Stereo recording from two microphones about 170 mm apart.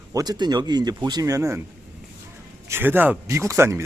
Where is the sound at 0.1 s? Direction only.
20° right (ahead or behind).